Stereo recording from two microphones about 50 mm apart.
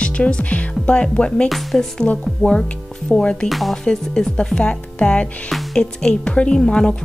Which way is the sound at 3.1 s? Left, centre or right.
Centre.